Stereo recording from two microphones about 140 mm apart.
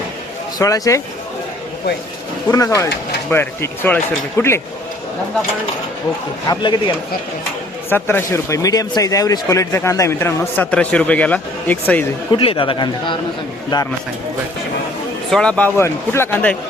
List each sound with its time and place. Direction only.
0.6 s speech: 20° left (ahead or behind)
2.5 s speech: 25° left (ahead or behind)
6.5 s a man's voice: 35° left (ahead or behind)
7.9 s speech: 15° left (ahead or behind)
12.3 s a man's voice: 40° left (ahead or behind)
15.3 s speech: 5° left (ahead or behind)